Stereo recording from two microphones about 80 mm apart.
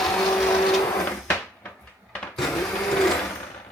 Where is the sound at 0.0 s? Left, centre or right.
Centre.